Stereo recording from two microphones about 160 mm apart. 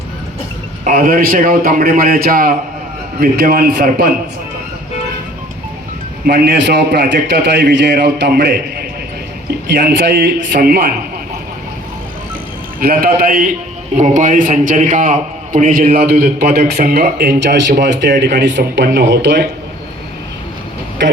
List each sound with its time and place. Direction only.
0.9 s a man's voice: 60° right (ahead or behind)
6.2 s a man's voice: 90° right; by 10.9 s 70° right (ahead or behind)
12.8 s a man's voice: 65° right (ahead or behind); by 19.5 s 90° right